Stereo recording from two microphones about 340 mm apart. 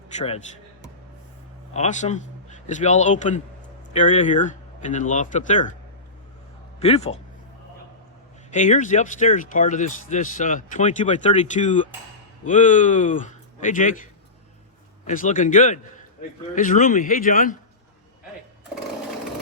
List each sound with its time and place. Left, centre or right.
0.2 s speech: left
1.7 s speech: centre
6.7 s speech: centre
8.4 s speech: left